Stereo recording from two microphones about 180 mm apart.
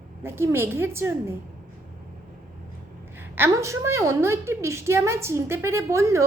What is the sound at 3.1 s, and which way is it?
A woman's voice, 10° right (ahead or behind).